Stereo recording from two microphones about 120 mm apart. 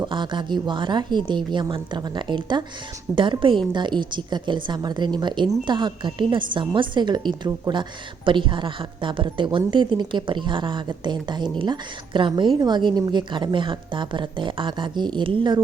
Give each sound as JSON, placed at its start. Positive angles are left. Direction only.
{"t": 0.0, "sound": "a woman's voice", "side_deg": -40}